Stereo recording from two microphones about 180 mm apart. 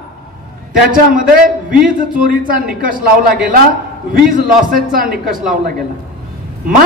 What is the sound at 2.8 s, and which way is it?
A man's voice, 50° right (ahead or behind).